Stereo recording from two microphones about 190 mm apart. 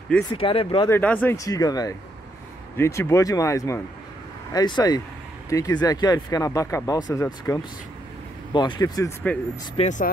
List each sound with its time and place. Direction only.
0.3 s speech: 30° left (ahead or behind)
0.8 s speech: 10° left (ahead or behind)
9.8 s speech: 40° left (ahead or behind)